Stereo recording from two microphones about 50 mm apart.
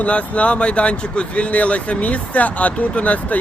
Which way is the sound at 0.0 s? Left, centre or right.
Left.